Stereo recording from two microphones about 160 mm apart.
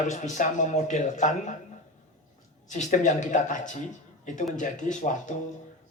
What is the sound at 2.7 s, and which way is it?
A man's voice, 50° left (ahead or behind).